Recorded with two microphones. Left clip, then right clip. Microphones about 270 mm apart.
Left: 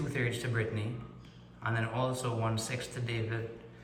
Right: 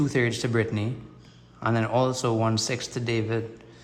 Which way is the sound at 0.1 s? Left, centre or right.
Right.